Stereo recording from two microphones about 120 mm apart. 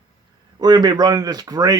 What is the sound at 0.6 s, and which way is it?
Speech, 35° right (ahead or behind).